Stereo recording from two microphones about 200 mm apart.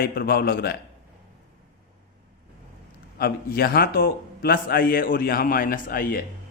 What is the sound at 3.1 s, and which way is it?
A man's voice, 50° left (ahead or behind).